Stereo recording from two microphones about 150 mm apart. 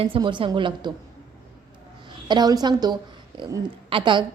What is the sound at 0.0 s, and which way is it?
Speech, 35° right (ahead or behind).